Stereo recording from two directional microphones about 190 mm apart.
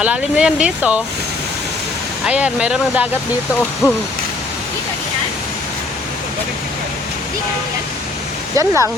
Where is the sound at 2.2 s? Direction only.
5° right (ahead or behind).